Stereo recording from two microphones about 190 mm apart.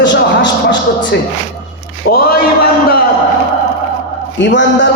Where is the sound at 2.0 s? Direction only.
55° left (ahead or behind).